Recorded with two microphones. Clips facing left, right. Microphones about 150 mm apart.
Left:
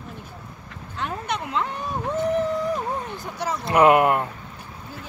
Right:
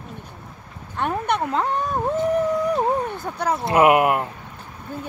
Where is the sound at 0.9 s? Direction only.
55° right (ahead or behind).